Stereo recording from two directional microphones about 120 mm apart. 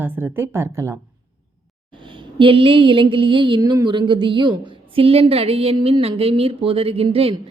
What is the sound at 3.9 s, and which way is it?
A woman's voice, 40° right (ahead or behind).